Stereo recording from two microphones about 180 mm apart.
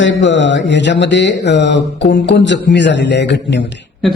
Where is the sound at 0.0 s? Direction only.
90° left.